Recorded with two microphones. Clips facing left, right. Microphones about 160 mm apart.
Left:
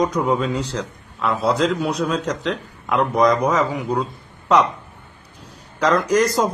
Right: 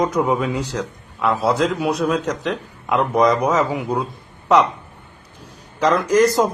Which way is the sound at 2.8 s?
15° right (ahead or behind).